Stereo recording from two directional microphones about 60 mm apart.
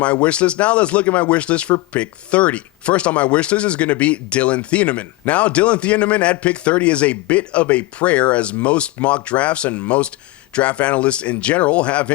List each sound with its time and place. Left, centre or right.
0.0 s speech: left